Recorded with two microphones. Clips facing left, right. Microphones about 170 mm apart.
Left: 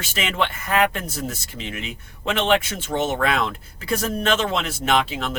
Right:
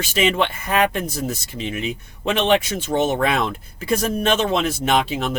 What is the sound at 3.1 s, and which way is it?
Speech, 20° right (ahead or behind).